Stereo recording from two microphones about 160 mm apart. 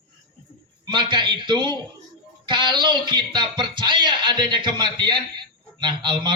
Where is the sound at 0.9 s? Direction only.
30° right (ahead or behind).